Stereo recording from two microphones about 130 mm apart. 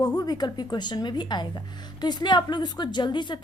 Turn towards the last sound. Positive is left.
turn(degrees=35)  # may be behind; listen again after turning